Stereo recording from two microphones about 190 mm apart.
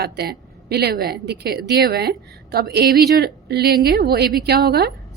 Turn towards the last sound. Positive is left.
turn(degrees=-55)  # may be behind; listen again after turning